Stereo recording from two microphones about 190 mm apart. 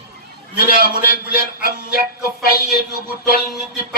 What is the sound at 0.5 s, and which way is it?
A man's voice, 50° left (ahead or behind).